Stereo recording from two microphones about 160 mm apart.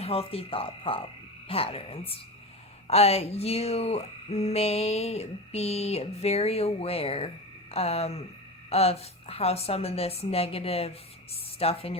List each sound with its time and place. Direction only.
0.0 s speech: 40° left (ahead or behind)